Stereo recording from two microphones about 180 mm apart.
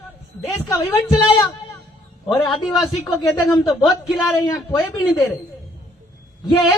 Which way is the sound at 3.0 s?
20° left (ahead or behind).